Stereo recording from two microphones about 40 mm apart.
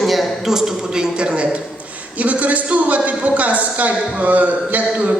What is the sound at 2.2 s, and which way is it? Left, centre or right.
A man's voice, right.